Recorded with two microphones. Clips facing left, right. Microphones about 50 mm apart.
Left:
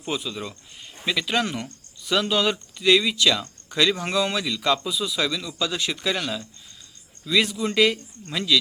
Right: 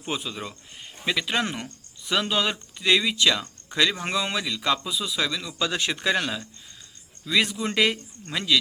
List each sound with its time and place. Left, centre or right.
0.0 s a man's voice: centre
5.5 s a man's voice: right
7.3 s a man's voice: centre